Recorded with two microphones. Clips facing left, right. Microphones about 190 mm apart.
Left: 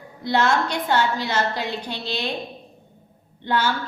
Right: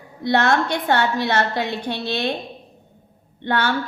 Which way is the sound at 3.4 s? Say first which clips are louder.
Right 1 dB; 60° right (ahead or behind).